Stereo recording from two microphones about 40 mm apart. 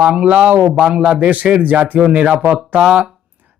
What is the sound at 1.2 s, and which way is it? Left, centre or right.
Speech, right.